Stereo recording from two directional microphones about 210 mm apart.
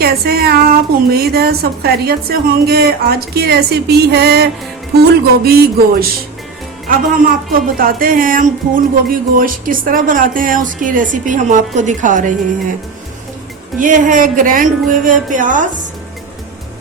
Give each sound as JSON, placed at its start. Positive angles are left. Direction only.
{"t": 0.0, "sound": "a woman's voice", "side_deg": -45}
{"t": 5.5, "sound": "a woman's voice", "side_deg": -50}
{"t": 13.7, "sound": "speech", "side_deg": -40}